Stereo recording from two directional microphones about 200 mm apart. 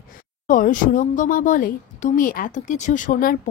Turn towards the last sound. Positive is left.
turn(degrees=45)  # may be behind; listen again after turning